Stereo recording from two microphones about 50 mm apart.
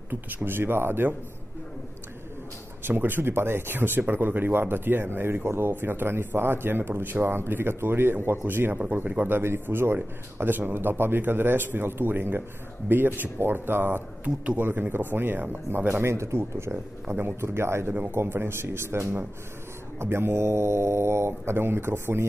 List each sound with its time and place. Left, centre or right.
0.1 s speech: right
2.8 s speech: right
14.2 s speech: right
14.6 s speech: right
16.0 s speech: right
18.1 s speech: right